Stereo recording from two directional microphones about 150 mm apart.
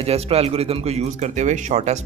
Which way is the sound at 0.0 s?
45° right (ahead or behind).